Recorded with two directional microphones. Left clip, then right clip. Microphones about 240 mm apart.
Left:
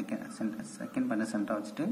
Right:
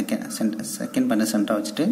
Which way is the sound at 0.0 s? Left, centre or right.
Right.